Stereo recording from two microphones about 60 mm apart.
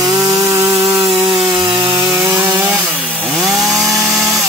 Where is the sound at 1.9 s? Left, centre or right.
Right.